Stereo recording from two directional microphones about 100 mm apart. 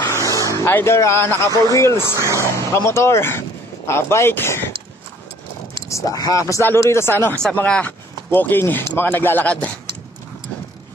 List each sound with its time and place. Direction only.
0.0 s vehicle: 30° left (ahead or behind)
0.6 s speech: 25° left (ahead or behind)
2.0 s speech: 35° right (ahead or behind)
2.9 s speech: 25° left (ahead or behind)
5.9 s speech: 35° left (ahead or behind); by 9.7 s 15° left (ahead or behind)